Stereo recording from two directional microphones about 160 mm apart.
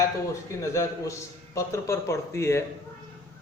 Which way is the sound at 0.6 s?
20° left (ahead or behind).